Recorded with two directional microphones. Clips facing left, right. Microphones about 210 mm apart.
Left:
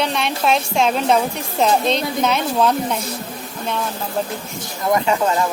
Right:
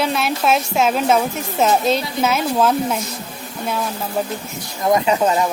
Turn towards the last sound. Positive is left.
turn(degrees=-15)  # may be behind; listen again after turning